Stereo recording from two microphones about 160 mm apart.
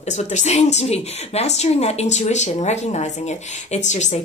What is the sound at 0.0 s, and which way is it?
Speech, 45° left (ahead or behind).